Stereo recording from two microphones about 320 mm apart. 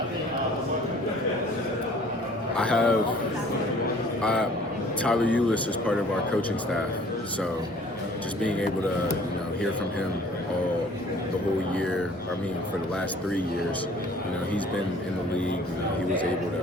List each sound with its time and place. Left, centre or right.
2.6 s speech: centre
4.2 s a man's voice: centre